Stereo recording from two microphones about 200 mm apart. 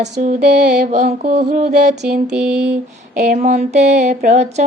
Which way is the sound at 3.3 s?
45° right (ahead or behind).